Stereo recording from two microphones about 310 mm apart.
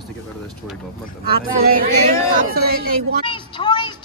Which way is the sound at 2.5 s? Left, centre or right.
Right.